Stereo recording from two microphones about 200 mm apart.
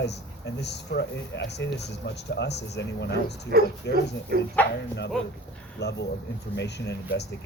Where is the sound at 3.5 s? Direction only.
50° right (ahead or behind).